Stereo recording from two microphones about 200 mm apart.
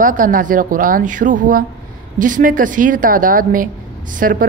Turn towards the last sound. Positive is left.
turn(degrees=-45)  # may be behind; listen again after turning